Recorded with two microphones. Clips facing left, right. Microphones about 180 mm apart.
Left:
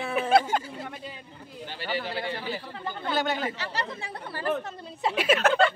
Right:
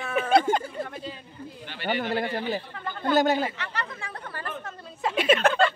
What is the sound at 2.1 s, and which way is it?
Speech, 40° right (ahead or behind).